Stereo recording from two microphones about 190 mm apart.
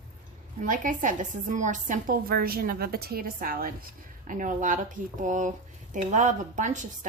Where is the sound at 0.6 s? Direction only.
45° right (ahead or behind).